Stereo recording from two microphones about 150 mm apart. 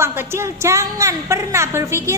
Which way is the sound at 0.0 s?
15° right (ahead or behind).